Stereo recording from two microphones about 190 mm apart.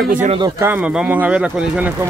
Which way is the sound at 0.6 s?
5° right (ahead or behind).